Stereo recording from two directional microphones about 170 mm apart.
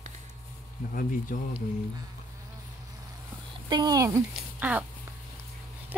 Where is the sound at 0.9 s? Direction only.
55° left (ahead or behind).